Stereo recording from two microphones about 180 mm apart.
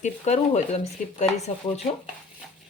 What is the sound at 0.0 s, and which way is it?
Speech, 40° left (ahead or behind).